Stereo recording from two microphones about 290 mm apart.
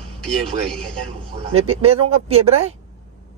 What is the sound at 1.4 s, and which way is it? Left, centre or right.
Speech, centre.